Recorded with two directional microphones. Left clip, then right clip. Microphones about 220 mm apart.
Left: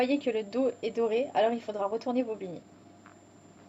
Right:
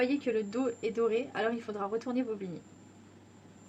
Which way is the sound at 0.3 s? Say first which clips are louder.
Left 3 dB; 10° right (ahead or behind).